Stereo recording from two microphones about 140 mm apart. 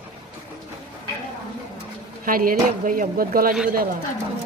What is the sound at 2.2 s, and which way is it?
Speech, 85° right.